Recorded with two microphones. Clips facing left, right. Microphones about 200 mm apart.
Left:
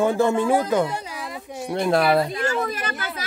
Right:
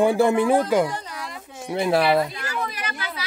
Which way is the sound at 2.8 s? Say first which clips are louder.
Left 2 dB; 50° left (ahead or behind).